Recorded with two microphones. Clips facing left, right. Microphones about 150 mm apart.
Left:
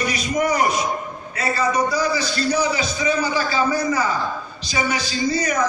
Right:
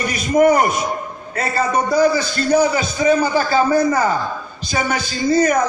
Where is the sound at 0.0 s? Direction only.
50° right (ahead or behind).